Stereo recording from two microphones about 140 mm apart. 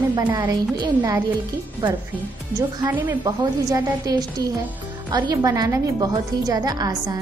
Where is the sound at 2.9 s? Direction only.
15° right (ahead or behind).